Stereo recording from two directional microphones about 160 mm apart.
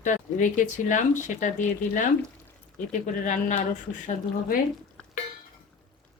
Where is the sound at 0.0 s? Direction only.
50° left (ahead or behind).